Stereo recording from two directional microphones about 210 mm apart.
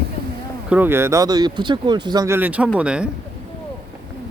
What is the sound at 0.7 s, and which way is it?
Speech, 10° right (ahead or behind).